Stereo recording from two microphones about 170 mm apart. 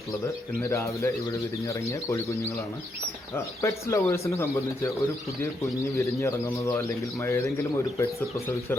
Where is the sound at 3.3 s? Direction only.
15° left (ahead or behind).